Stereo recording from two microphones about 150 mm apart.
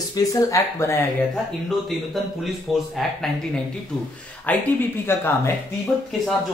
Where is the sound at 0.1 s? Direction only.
20° left (ahead or behind).